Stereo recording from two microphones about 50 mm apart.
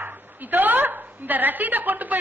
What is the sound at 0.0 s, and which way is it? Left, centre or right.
A woman's voice, right.